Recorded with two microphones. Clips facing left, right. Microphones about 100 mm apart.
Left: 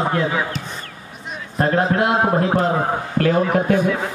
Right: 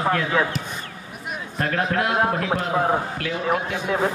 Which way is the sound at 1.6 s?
30° left (ahead or behind).